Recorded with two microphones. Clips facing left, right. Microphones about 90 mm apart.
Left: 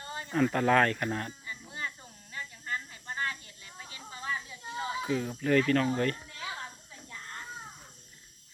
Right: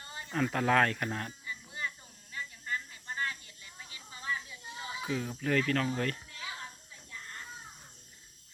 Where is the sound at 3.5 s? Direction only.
30° left (ahead or behind).